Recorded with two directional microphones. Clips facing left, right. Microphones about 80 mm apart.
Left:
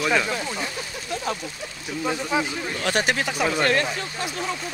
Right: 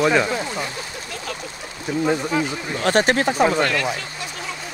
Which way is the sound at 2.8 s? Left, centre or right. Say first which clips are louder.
Right 6 dB; right.